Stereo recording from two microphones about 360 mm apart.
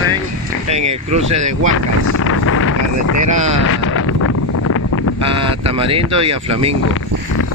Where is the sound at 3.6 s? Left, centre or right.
Left.